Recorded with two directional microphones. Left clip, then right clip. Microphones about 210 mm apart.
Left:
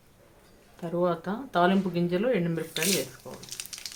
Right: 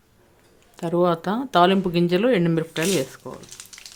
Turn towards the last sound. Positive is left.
turn(degrees=-40)  # may be behind; listen again after turning